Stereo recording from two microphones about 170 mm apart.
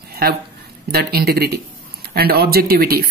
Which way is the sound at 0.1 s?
65° right (ahead or behind).